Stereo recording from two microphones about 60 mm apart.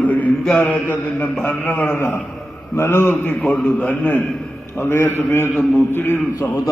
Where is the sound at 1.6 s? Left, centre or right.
Left.